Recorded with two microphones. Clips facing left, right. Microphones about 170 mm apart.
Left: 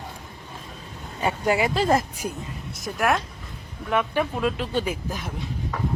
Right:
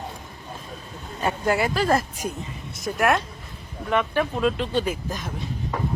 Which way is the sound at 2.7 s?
Centre (ahead or behind).